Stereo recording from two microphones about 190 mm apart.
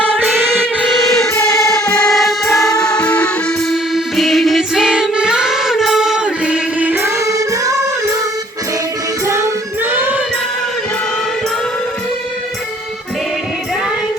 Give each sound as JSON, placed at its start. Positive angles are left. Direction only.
{"t": 0.3, "sound": "music", "side_deg": -10}
{"t": 1.0, "sound": "music", "side_deg": 0}
{"t": 1.6, "sound": "music", "side_deg": 15}
{"t": 2.0, "sound": "music", "side_deg": 0}
{"t": 9.2, "sound": "music", "side_deg": -15}